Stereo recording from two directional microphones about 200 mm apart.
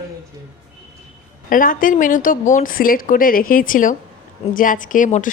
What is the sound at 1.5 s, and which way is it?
A woman's voice, 45° left (ahead or behind).